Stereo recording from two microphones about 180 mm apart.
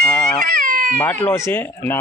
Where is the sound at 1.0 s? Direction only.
10° left (ahead or behind).